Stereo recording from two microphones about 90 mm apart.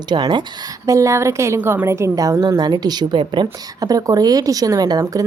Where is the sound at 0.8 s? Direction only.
35° right (ahead or behind); by 3.5 s 60° right (ahead or behind).